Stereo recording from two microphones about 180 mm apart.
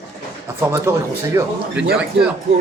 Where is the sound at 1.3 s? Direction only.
15° right (ahead or behind).